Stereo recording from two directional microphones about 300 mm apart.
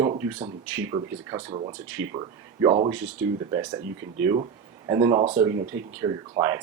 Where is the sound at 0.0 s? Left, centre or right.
Centre.